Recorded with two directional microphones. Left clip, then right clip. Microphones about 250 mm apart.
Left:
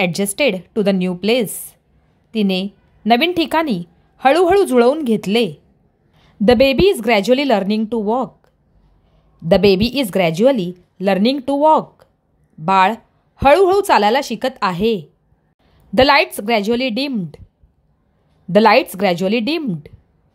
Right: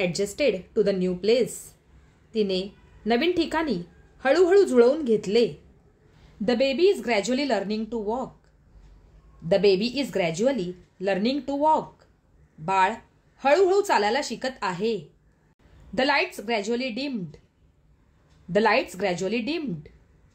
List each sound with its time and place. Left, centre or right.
0.0 s a woman's voice: left
9.5 s a woman's voice: left
18.5 s a woman's voice: left